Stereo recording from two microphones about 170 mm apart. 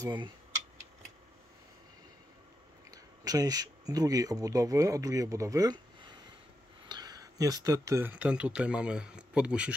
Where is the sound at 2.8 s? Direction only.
20° right (ahead or behind).